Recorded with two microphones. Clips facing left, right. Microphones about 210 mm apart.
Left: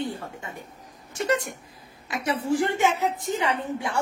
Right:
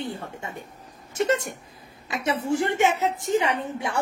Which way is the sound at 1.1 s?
25° right (ahead or behind).